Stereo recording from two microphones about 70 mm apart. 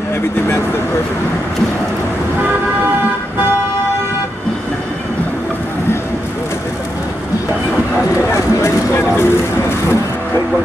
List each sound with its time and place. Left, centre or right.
8.6 s speech: left